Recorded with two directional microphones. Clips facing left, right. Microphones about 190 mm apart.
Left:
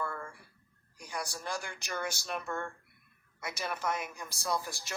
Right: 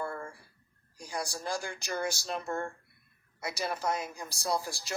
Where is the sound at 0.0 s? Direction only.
35° right (ahead or behind).